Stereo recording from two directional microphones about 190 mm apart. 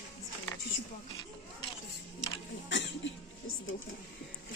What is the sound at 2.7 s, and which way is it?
Cough, 75° left (ahead or behind).